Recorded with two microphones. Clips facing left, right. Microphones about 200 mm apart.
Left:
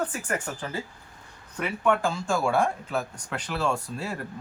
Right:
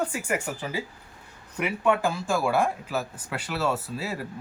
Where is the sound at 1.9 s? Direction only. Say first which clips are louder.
Even; 5° right (ahead or behind).